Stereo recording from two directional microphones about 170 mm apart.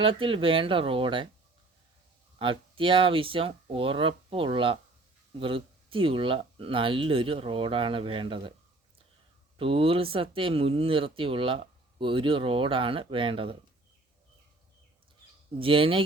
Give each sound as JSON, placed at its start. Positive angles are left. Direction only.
{"t": 0.0, "sound": "speech", "side_deg": -30}
{"t": 2.4, "sound": "speech", "side_deg": -30}
{"t": 9.6, "sound": "speech", "side_deg": -30}
{"t": 15.5, "sound": "speech", "side_deg": -30}